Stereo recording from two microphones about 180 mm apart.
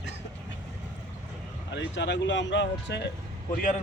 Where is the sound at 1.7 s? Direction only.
80° left.